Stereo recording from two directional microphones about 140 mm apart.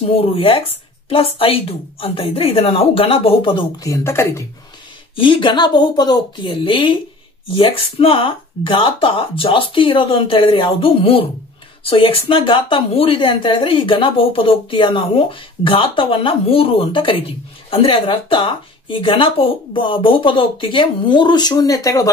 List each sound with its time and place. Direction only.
0.1 s speech: 40° left (ahead or behind)
3.8 s speech: 20° left (ahead or behind)
5.1 s speech: 40° left (ahead or behind)